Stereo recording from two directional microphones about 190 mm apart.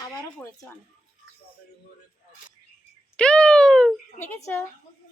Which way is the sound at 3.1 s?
5° left (ahead or behind).